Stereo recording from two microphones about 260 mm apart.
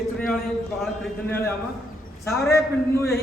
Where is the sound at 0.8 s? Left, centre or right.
Centre.